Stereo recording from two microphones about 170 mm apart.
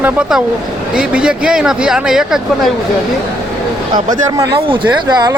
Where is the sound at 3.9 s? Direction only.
25° right (ahead or behind).